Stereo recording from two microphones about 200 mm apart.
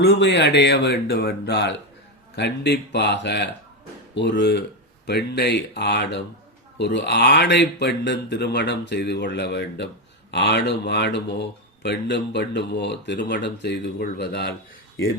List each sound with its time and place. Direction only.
0.0 s speech: 55° left (ahead or behind)